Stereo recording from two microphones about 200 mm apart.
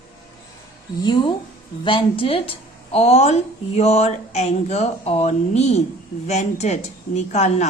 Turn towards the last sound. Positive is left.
turn(degrees=35)  # may be behind; listen again after turning